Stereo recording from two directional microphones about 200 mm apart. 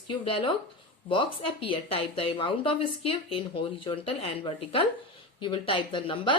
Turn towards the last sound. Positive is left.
turn(degrees=25)  # may be behind; listen again after turning